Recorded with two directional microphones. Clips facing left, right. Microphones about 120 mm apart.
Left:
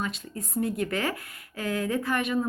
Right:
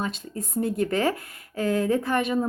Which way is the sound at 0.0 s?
30° right (ahead or behind).